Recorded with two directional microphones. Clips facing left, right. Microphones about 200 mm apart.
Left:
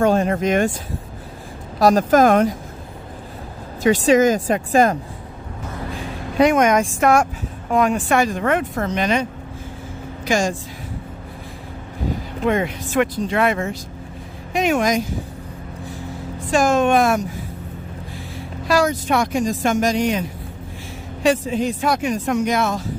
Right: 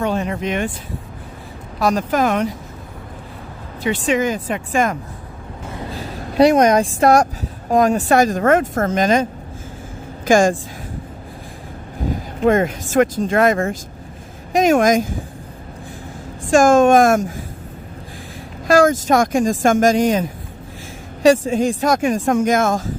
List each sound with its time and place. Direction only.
0.0 s speech: 45° left (ahead or behind)
1.8 s speech: 40° left (ahead or behind)
3.8 s speech: 40° left (ahead or behind)
5.9 s speech: 35° right (ahead or behind)
12.4 s speech: 45° right (ahead or behind)
16.3 s speech: 45° right (ahead or behind)
18.7 s speech: 45° right (ahead or behind)